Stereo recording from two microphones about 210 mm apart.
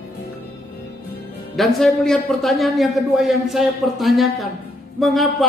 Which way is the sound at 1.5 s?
Centre (ahead or behind).